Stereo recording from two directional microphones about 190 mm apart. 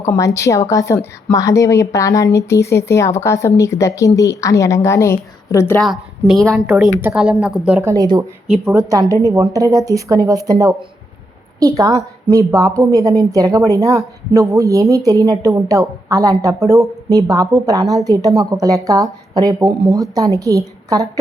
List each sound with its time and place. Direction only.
0.0 s a woman's voice: 15° left (ahead or behind)
5.8 s a woman's voice: centre (ahead or behind); by 21.1 s 15° right (ahead or behind)